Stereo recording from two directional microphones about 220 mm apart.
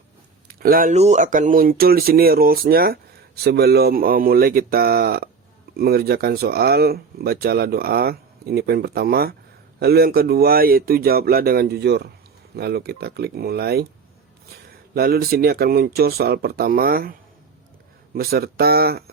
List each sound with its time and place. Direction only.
0.4 s speech: 40° right (ahead or behind)
14.9 s speech: 45° right (ahead or behind)